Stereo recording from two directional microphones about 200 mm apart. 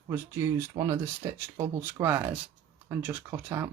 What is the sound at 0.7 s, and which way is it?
Speech, 15° right (ahead or behind).